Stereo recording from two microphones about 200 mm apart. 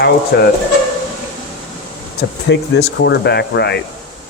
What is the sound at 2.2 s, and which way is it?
Speech, 55° left (ahead or behind).